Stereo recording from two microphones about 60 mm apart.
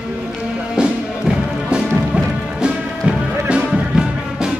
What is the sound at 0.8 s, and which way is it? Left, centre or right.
Music, centre.